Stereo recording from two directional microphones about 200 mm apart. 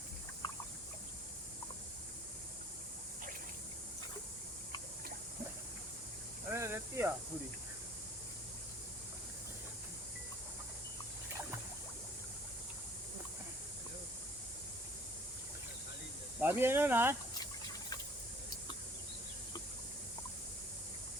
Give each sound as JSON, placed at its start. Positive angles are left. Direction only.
{"t": 0.4, "sound": "boat", "side_deg": 25}
{"t": 6.5, "sound": "snake", "side_deg": -10}
{"t": 16.4, "sound": "speech", "side_deg": -10}
{"t": 17.3, "sound": "a sound", "side_deg": 20}